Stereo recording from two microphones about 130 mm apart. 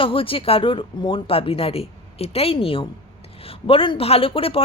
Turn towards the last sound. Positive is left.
turn(degrees=45)  # may be behind; listen again after turning